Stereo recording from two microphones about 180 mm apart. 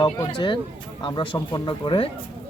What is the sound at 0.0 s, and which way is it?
Speech, 25° left (ahead or behind).